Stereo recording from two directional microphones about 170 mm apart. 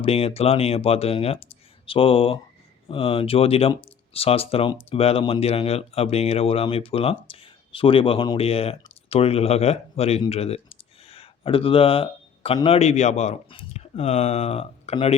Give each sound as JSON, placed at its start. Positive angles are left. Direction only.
{"t": 0.0, "sound": "speech", "side_deg": 35}
{"t": 11.1, "sound": "a sound", "side_deg": 35}
{"t": 12.6, "sound": "speech", "side_deg": 35}